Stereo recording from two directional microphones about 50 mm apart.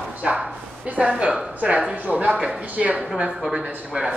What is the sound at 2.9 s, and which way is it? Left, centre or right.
Speech, centre.